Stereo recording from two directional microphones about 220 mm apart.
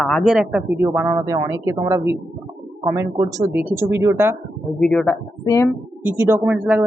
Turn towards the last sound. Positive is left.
turn(degrees=-5)  # may be behind; listen again after turning